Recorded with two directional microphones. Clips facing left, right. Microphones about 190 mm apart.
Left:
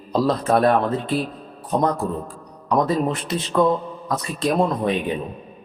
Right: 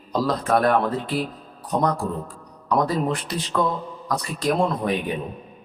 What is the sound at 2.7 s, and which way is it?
Speech, 25° left (ahead or behind).